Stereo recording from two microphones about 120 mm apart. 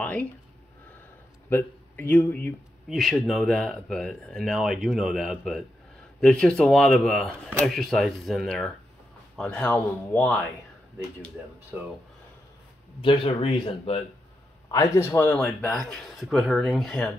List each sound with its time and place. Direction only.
0.0 s a sound: 10° left (ahead or behind)
1.5 s speech: 20° left (ahead or behind)
2.9 s speech: centre (ahead or behind)
11.7 s speech: 10° right (ahead or behind)
13.0 s speech: 50° left (ahead or behind)
14.7 s speech: 25° left (ahead or behind); by 17.1 s 5° left (ahead or behind)